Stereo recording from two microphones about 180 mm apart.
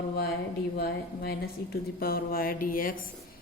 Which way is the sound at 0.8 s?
60° left (ahead or behind).